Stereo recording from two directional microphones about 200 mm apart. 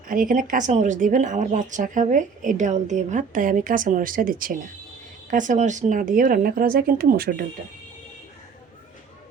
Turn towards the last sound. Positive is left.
turn(degrees=-45)  # may be behind; listen again after turning